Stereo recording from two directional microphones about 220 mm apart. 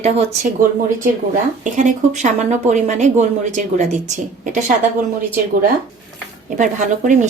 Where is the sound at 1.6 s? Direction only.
35° right (ahead or behind).